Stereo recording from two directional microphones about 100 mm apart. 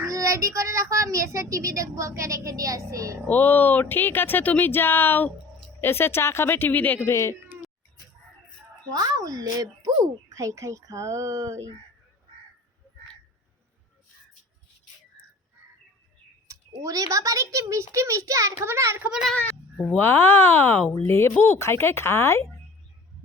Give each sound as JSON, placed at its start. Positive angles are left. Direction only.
{"t": 0.0, "sound": "a child's voice", "side_deg": -35}
{"t": 3.2, "sound": "speech", "side_deg": 15}
{"t": 7.1, "sound": "speech", "side_deg": 30}
{"t": 8.9, "sound": "a child's voice", "side_deg": -40}
{"t": 16.5, "sound": "a child's voice", "side_deg": -30}
{"t": 19.4, "sound": "speech", "side_deg": 15}